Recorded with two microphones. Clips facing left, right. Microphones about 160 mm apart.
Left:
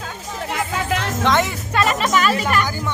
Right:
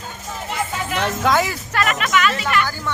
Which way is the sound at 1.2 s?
5° right (ahead or behind).